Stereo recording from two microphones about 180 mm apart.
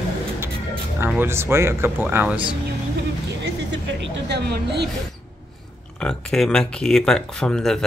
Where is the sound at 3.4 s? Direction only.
80° right; by 4.8 s 65° right (ahead or behind).